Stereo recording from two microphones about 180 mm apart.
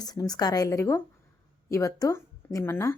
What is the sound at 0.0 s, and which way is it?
A woman's voice, 20° left (ahead or behind).